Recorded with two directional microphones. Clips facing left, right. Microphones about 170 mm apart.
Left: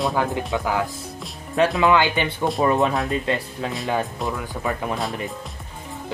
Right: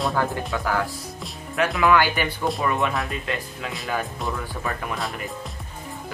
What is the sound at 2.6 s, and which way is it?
Speech, 35° left (ahead or behind).